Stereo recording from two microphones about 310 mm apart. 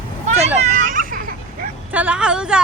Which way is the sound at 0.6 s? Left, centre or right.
Right.